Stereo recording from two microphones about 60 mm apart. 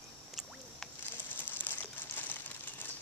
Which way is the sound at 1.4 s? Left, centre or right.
Left.